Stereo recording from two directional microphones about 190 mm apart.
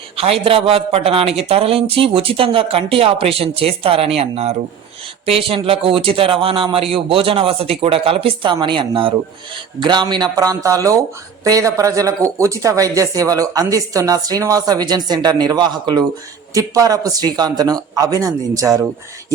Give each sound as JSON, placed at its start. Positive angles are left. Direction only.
{"t": 0.2, "sound": "speech", "side_deg": -30}